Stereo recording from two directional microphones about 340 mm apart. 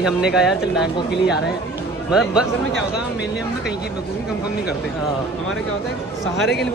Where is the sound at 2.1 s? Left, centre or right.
Centre.